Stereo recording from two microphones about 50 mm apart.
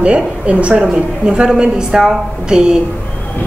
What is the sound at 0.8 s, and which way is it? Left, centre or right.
A woman's voice, centre.